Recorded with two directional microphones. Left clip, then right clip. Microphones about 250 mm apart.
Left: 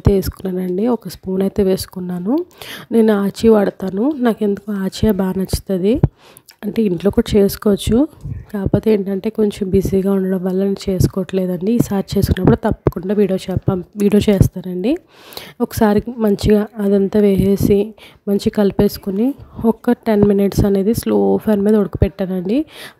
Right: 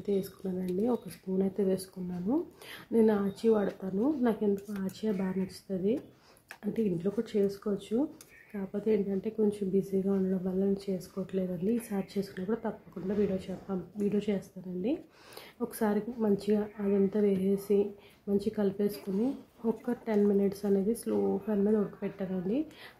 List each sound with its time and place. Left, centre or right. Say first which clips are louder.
0.1 s speech: left 11 dB; left